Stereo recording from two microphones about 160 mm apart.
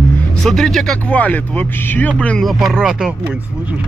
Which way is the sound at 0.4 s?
Centre (ahead or behind).